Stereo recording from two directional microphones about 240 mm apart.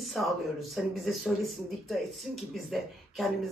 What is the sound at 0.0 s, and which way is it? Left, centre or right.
Speech, centre.